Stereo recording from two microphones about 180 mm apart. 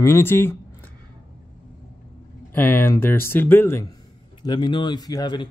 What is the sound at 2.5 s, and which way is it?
Speech, 10° left (ahead or behind).